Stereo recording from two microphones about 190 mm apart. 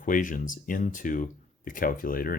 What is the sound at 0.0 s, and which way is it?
Speech, 45° left (ahead or behind).